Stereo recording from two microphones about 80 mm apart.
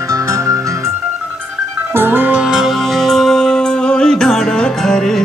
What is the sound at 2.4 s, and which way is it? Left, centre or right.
Music, centre.